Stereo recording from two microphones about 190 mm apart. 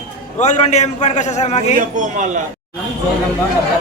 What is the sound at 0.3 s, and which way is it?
A man's voice, 40° left (ahead or behind).